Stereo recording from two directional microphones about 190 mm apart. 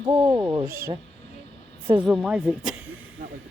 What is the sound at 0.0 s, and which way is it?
Speech, 25° right (ahead or behind).